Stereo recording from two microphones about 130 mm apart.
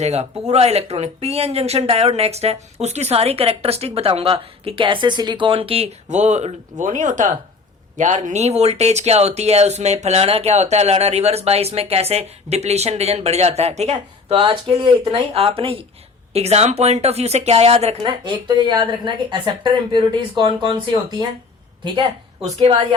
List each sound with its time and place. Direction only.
0.0 s speech: 55° right (ahead or behind)
14.3 s speech: 40° right (ahead or behind)
18.3 s speech: 35° right (ahead or behind)
22.4 s speech: 55° right (ahead or behind)
22.7 s speech: 40° right (ahead or behind)